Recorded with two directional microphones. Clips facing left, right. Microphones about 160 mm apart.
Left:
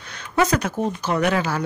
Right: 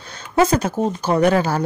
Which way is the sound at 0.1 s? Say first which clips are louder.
Right 4 dB; 30° right (ahead or behind).